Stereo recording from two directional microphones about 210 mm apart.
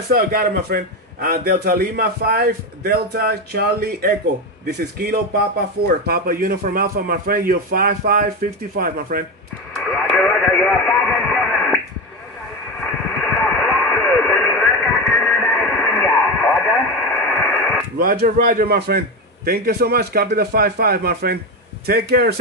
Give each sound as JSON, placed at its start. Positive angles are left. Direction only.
{"t": 0.1, "sound": "a man's voice", "side_deg": -45}
{"t": 9.8, "sound": "radio", "side_deg": 0}
{"t": 12.8, "sound": "radio", "side_deg": 5}
{"t": 17.9, "sound": "a man's voice", "side_deg": -45}